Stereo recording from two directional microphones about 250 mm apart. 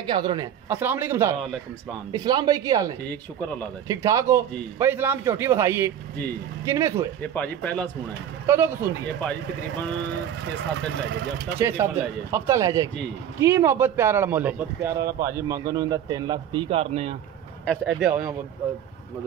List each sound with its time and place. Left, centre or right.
0.0 s speech: centre
1.4 s speech: centre
2.2 s speech: centre
7.2 s speech: centre
8.5 s speech: centre
11.6 s speech: centre
17.6 s speech: centre